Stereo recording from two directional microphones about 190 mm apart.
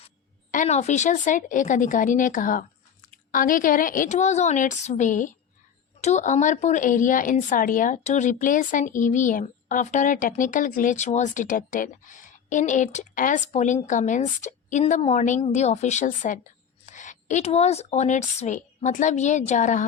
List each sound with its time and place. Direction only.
0.5 s a woman's voice: 40° left (ahead or behind)